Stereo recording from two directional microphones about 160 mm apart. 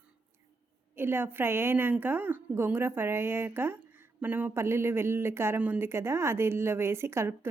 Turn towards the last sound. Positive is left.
turn(degrees=-15)  # may be behind; listen again after turning